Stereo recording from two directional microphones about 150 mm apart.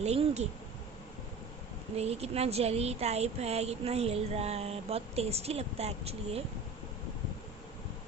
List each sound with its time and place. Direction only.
0.0 s speech: 45° right (ahead or behind)
2.0 s speech: 45° right (ahead or behind)